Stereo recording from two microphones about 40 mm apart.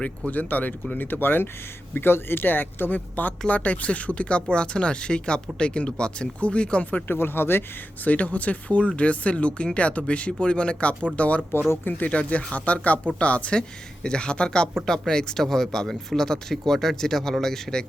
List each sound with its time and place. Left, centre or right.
0.3 s speech: left
2.0 s speech: left
3.4 s speech: left
7.1 s speech: left
8.0 s speech: left; by 17.8 s centre